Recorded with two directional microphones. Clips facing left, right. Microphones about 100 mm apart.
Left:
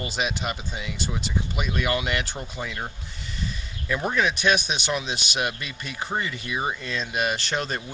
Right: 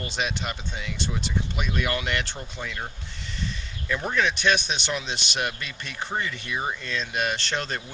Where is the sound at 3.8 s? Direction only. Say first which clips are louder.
Left 1 dB; 5° left (ahead or behind).